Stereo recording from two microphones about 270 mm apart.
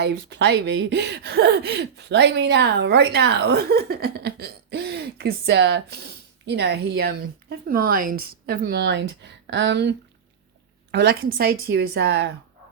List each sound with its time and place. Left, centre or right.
0.1 s speech: right
0.3 s speech: right
10.9 s speech: right